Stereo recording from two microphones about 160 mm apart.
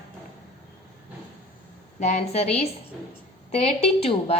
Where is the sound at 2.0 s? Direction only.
45° left (ahead or behind).